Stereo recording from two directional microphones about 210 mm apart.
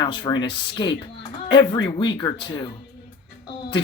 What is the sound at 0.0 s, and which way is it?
Speech, 20° left (ahead or behind).